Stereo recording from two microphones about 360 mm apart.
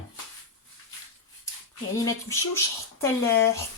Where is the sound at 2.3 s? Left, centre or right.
Centre.